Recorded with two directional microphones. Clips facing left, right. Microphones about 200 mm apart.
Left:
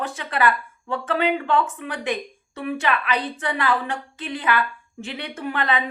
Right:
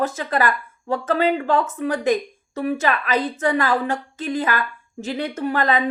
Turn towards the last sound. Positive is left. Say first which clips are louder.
# right 4 dB
turn(degrees=-40)  # may be behind; listen again after turning